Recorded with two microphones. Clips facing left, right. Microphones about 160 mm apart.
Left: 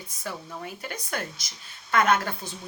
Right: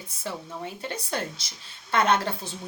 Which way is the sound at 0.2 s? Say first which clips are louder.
Right 2 dB; 25° right (ahead or behind).